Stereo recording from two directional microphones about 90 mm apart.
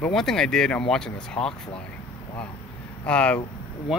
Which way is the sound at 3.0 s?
15° left (ahead or behind).